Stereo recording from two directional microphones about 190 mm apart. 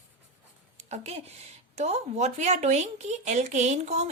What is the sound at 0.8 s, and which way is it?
Speech, 35° right (ahead or behind).